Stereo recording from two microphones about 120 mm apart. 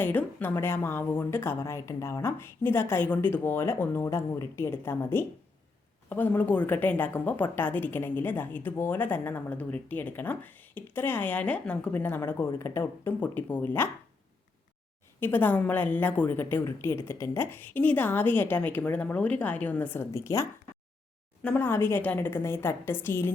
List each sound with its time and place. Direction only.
0.0 s a woman's voice: 15° left (ahead or behind)
15.2 s a woman's voice: 15° left (ahead or behind)